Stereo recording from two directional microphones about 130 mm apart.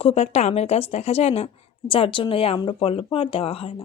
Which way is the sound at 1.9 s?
40° left (ahead or behind).